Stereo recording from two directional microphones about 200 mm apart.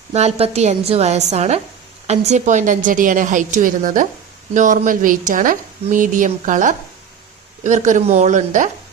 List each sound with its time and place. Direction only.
0.1 s a woman's voice: 30° right (ahead or behind)